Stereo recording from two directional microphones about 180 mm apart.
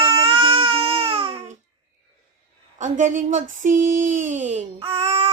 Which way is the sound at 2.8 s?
45° right (ahead or behind).